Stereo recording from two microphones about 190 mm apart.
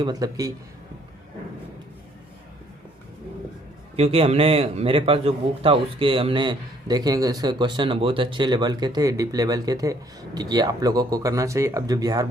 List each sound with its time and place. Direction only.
0.0 s a man's voice: 20° right (ahead or behind)
3.9 s a man's voice: 30° right (ahead or behind)